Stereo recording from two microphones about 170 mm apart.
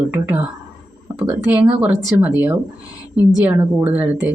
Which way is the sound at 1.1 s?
20° right (ahead or behind).